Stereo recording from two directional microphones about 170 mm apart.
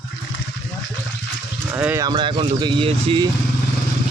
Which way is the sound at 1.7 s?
10° right (ahead or behind).